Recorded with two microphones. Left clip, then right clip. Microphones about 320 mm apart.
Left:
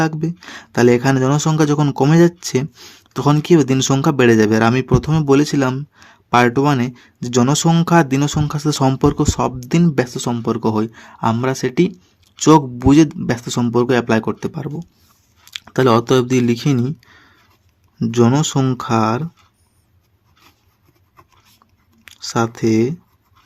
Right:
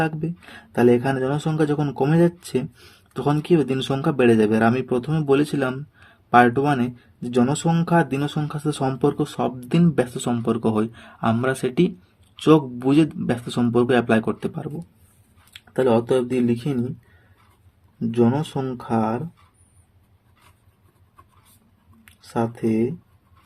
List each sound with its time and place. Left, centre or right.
0.0 s speech: left
15.5 s speech: left
18.0 s speech: left
22.0 s speech: left